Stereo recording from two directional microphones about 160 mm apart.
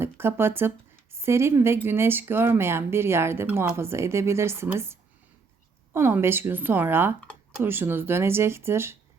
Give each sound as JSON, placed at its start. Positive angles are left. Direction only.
{"t": 0.0, "sound": "speech", "side_deg": -15}